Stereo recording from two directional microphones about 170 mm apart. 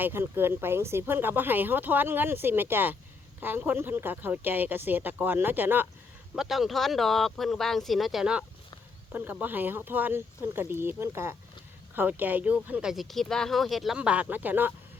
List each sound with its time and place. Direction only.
0.0 s speech: 15° right (ahead or behind)